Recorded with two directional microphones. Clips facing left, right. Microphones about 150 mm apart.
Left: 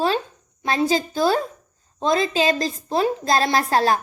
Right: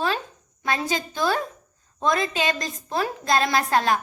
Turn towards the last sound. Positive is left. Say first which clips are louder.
# left 2 dB
turn(degrees=35)  # may be behind; listen again after turning